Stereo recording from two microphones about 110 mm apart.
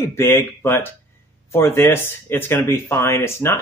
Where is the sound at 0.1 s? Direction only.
25° left (ahead or behind).